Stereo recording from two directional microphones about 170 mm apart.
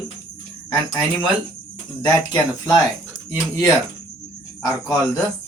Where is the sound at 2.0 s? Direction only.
25° left (ahead or behind).